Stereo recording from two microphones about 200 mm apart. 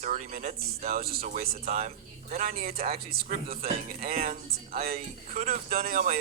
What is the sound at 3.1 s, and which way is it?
Speech, 45° right (ahead or behind).